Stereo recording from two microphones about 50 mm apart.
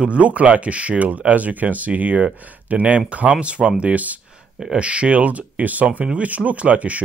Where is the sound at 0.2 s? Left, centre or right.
Right.